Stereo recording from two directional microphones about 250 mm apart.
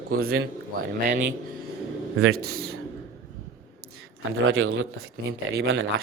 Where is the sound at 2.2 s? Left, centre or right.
Right.